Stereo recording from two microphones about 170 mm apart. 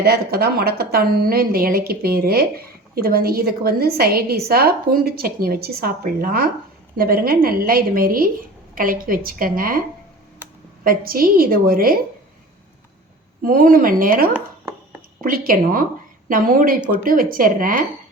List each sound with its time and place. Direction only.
0.0 s a woman's voice: 65° right (ahead or behind)
13.4 s a woman's voice: 55° right (ahead or behind)